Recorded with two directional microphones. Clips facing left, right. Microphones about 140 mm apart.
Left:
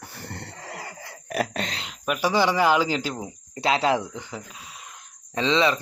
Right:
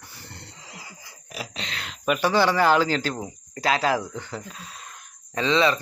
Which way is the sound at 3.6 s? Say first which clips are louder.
Left 1 dB; 25° left (ahead or behind).